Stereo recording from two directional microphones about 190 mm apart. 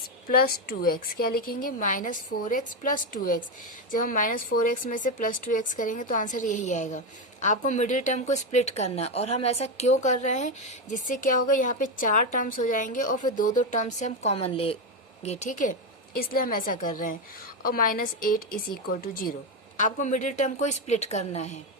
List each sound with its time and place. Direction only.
0.3 s a woman's voice: 50° left (ahead or behind)